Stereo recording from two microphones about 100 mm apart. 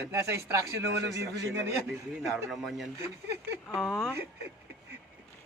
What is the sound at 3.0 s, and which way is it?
Speech, 30° right (ahead or behind).